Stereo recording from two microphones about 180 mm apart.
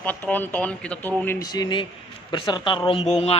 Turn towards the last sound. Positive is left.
turn(degrees=30)  # may be behind; listen again after turning